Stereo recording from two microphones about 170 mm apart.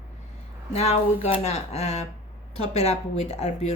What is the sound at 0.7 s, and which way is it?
Speech, 40° left (ahead or behind).